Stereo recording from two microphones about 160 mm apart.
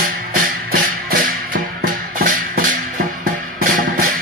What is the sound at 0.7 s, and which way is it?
Music, 65° right (ahead or behind).